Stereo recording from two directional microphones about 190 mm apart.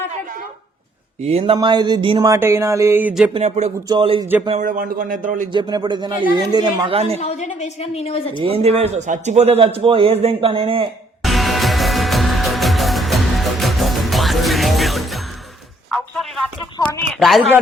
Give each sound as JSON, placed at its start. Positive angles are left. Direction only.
{"t": 1.2, "sound": "a man's voice", "side_deg": -35}
{"t": 1.5, "sound": "speech", "side_deg": -20}
{"t": 3.3, "sound": "a man's voice", "side_deg": -35}
{"t": 4.4, "sound": "speech", "side_deg": -40}
{"t": 5.5, "sound": "a woman's voice", "side_deg": -25}
{"t": 7.2, "sound": "a woman's voice", "side_deg": 35}
{"t": 8.4, "sound": "a man's voice", "side_deg": -30}
{"t": 11.2, "sound": "music", "side_deg": 0}
{"t": 15.9, "sound": "speech", "side_deg": 0}
{"t": 16.7, "sound": "speech", "side_deg": 20}
{"t": 17.2, "sound": "speech", "side_deg": 0}